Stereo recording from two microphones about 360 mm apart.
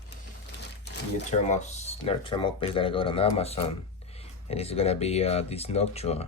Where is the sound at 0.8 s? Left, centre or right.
Centre.